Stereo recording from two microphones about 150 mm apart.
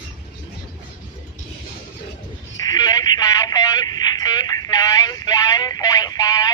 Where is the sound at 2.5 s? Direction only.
25° left (ahead or behind).